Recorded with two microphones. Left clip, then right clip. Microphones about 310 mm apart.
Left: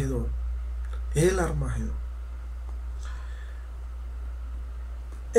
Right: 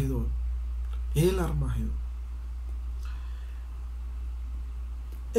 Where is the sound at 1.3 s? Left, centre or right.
Left.